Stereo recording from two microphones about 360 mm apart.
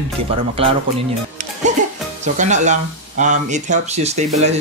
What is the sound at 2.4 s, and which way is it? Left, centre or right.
Speech, centre.